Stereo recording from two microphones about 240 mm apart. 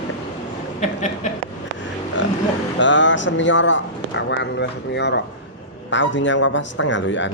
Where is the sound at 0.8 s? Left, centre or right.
Left.